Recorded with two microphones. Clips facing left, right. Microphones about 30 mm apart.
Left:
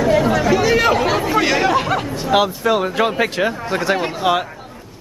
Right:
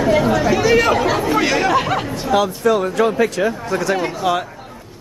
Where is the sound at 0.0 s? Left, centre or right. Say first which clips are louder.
Even; centre.